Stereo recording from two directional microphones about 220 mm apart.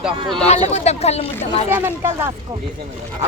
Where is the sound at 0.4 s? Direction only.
30° left (ahead or behind).